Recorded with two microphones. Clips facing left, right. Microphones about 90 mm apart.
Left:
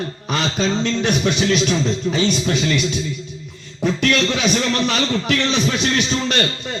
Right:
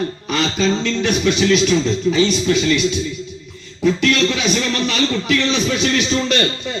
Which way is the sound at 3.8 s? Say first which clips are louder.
Right 2 dB; 45° left (ahead or behind).